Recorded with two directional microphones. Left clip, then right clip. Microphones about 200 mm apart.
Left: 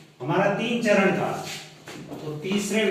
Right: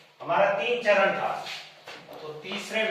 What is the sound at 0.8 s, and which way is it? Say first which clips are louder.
Speech: left 2 dB; centre (ahead or behind).